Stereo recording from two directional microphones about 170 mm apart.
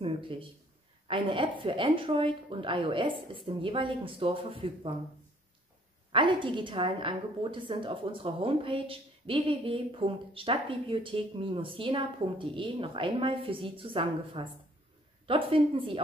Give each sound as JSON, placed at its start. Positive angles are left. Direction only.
{"t": 0.0, "sound": "a woman's voice", "side_deg": -30}
{"t": 6.1, "sound": "a woman's voice", "side_deg": -30}